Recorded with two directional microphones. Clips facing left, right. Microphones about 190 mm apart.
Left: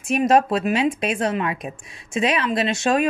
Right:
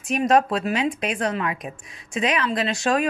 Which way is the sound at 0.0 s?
25° left (ahead or behind).